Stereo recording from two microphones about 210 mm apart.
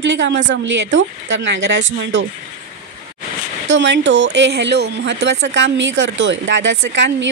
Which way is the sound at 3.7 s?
60° right (ahead or behind).